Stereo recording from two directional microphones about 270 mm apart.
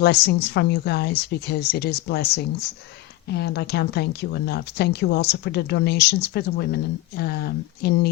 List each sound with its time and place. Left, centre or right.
0.0 s speech: left